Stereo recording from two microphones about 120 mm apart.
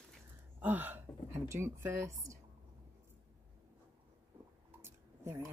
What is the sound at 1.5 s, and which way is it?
Speech, 20° right (ahead or behind).